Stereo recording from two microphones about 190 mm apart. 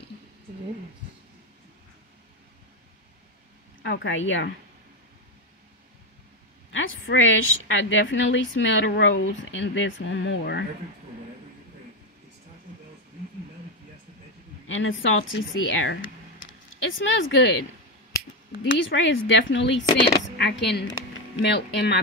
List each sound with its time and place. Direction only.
3.8 s speech: 75° left (ahead or behind)
6.7 s a woman's voice: 85° left; by 10.6 s 70° left (ahead or behind)
14.7 s speech: 90° left; by 17.6 s 75° left (ahead or behind)
18.6 s speech: 80° left; by 22.0 s 65° left (ahead or behind)